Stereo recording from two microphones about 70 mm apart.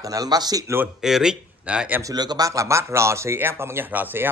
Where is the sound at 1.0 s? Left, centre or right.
Centre.